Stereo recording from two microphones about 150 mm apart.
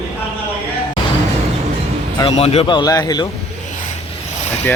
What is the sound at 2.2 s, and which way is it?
Speech, 45° left (ahead or behind).